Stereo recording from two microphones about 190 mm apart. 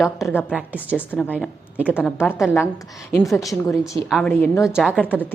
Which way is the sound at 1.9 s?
10° left (ahead or behind).